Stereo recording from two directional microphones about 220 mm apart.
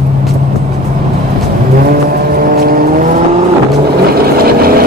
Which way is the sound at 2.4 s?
40° right (ahead or behind).